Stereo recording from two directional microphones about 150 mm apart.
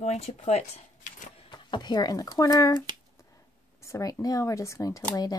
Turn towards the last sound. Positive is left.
turn(degrees=25)  # may be behind; listen again after turning